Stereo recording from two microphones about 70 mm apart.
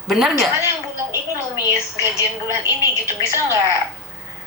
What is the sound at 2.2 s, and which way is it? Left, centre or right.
Speech, right.